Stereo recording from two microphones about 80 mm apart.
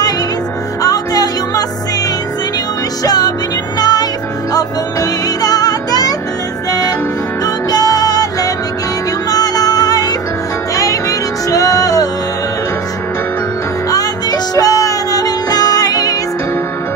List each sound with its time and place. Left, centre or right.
0.8 s music: left
3.0 s music: left
5.4 s music: left
7.4 s music: left
13.8 s music: left